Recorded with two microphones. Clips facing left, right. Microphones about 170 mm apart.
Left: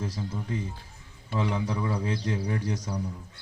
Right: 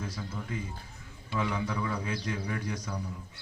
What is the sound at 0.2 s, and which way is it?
Speech, 25° left (ahead or behind).